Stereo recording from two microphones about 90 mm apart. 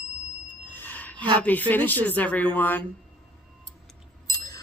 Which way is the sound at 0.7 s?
20° left (ahead or behind).